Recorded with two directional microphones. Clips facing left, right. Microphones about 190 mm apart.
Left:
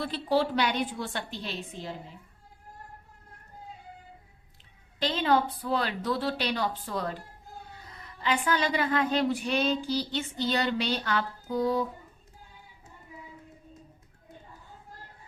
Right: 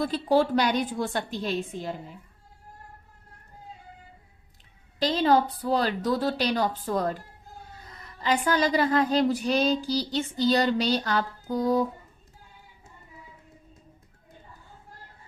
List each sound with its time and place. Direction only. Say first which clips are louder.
0.0 s a woman's voice: right 4 dB; 45° right (ahead or behind)
4.9 s child singing: right 4 dB; 40° right (ahead or behind)
8.2 s child singing: right 4 dB; 40° right (ahead or behind)